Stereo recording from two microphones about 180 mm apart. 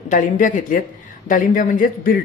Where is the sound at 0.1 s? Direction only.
45° left (ahead or behind).